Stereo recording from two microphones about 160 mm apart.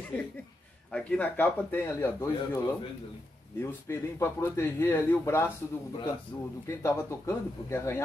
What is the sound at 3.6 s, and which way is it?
A man's voice, 15° left (ahead or behind).